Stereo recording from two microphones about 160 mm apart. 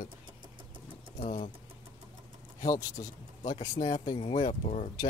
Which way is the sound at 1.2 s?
45° left (ahead or behind).